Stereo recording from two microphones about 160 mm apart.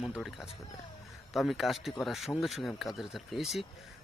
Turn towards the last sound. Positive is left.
turn(degrees=0)  # may be behind; listen again after turning